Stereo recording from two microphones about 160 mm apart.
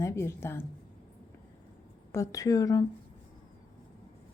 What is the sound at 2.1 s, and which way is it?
Speech, 20° left (ahead or behind).